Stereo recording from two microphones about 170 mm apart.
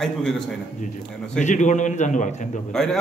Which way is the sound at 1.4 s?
45° left (ahead or behind).